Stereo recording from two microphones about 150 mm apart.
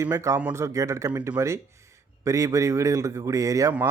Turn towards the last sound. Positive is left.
turn(degrees=-20)  # may be behind; listen again after turning